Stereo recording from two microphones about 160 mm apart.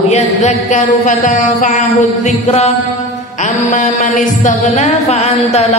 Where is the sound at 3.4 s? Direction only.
50° left (ahead or behind).